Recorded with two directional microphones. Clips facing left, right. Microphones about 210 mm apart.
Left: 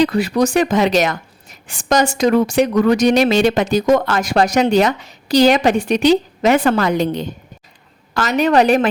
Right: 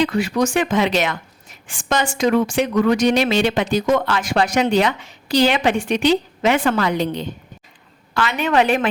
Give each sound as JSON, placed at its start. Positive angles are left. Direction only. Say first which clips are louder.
{"t": 0.0, "sound": "a woman's voice", "louder": "left 3 dB", "side_deg": 35}